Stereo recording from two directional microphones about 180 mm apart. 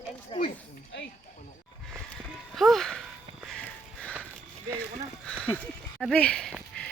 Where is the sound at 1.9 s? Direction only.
Centre (ahead or behind).